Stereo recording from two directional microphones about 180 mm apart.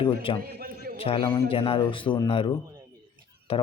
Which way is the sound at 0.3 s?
55° right (ahead or behind).